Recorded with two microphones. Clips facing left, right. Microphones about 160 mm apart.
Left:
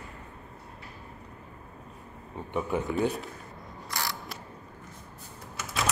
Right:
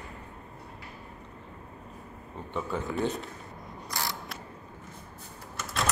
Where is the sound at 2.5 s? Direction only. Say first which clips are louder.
Left 3 dB; 15° left (ahead or behind).